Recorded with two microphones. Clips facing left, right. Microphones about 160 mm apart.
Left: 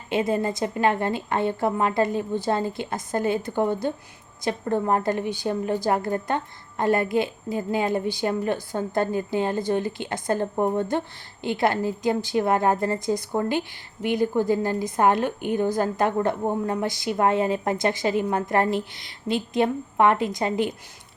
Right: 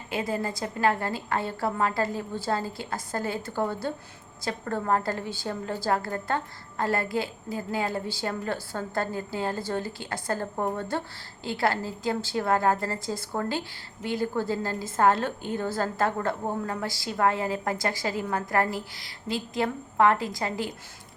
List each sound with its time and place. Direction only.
0.1 s a woman's voice: 20° left (ahead or behind)